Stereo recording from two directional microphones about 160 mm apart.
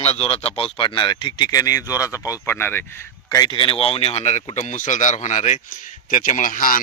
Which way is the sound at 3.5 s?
35° left (ahead or behind).